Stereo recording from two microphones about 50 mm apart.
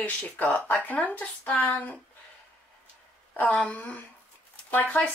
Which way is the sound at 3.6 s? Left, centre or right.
Left.